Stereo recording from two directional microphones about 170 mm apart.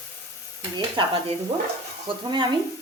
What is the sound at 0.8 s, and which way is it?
Speech, 30° right (ahead or behind).